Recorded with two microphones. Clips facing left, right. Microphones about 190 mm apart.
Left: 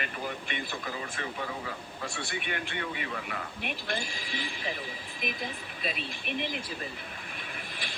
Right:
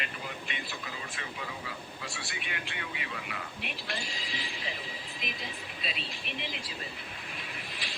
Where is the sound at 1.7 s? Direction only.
50° left (ahead or behind).